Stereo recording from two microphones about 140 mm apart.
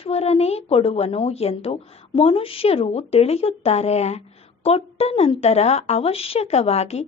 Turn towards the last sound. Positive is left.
turn(degrees=50)  # may be behind; listen again after turning